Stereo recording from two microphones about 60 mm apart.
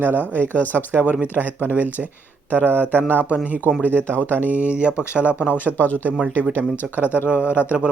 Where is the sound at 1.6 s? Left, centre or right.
Right.